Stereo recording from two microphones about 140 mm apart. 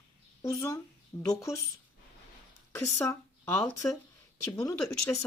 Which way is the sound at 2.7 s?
15° left (ahead or behind).